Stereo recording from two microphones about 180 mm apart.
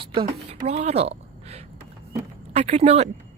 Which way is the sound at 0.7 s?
35° right (ahead or behind).